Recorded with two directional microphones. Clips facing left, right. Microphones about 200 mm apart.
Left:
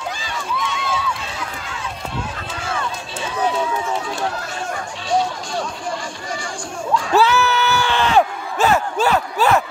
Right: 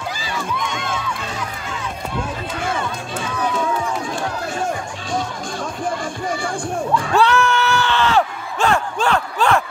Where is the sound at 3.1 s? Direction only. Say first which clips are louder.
Left 2 dB; 50° right (ahead or behind).